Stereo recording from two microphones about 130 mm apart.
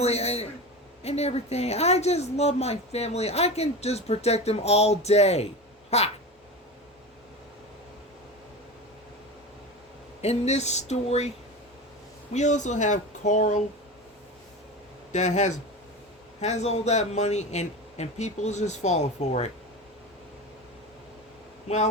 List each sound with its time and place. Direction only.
0.0 s a woman's voice: 55° left (ahead or behind)
10.2 s a woman's voice: 55° left (ahead or behind)
12.3 s speech: 65° left (ahead or behind)
15.1 s a woman's voice: 65° left (ahead or behind)
21.7 s a woman's voice: 60° left (ahead or behind)